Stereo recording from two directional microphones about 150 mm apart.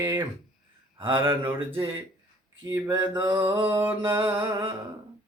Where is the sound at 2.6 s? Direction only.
20° right (ahead or behind).